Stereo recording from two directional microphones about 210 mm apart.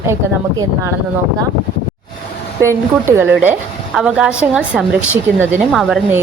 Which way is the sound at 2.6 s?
10° right (ahead or behind).